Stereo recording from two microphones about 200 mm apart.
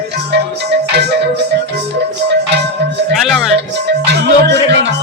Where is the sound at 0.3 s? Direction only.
55° right (ahead or behind).